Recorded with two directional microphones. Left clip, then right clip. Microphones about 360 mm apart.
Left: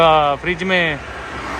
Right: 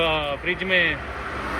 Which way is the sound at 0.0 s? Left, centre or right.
Left.